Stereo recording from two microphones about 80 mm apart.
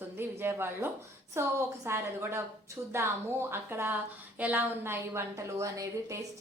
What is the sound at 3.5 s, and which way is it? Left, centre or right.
A woman's voice, right.